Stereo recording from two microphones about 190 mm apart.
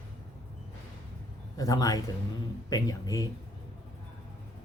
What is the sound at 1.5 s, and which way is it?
Speech, 20° left (ahead or behind).